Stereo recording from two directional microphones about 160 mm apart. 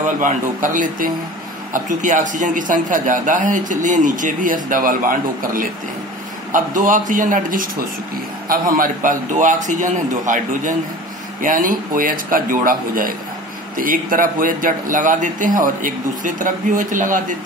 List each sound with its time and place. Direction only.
0.0 s a man's voice: 55° right (ahead or behind)